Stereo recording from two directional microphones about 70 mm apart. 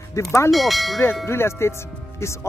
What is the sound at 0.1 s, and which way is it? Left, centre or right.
Speech, left.